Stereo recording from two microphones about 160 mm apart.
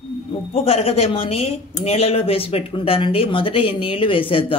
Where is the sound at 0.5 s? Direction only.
40° left (ahead or behind).